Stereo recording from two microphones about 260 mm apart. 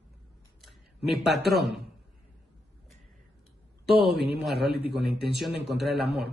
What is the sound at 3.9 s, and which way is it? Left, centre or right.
A man's voice, right.